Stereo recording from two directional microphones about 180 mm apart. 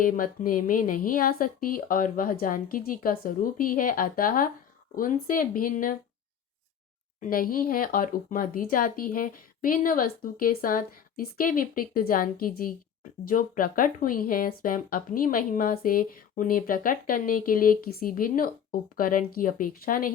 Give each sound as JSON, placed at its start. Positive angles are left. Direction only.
{"t": 0.0, "sound": "speech", "side_deg": 50}
{"t": 7.2, "sound": "speech", "side_deg": 50}